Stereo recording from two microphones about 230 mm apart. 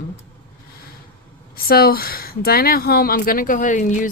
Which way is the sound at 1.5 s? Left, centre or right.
Left.